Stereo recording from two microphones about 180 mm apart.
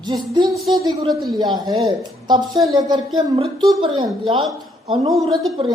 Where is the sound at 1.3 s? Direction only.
25° right (ahead or behind).